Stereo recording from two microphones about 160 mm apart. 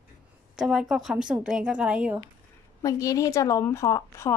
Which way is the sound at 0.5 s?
5° right (ahead or behind).